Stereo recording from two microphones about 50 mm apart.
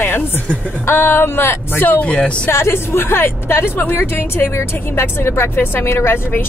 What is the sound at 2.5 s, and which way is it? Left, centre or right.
Speech, left.